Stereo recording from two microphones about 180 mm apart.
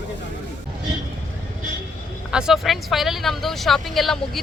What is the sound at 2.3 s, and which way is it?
Speech, 5° right (ahead or behind).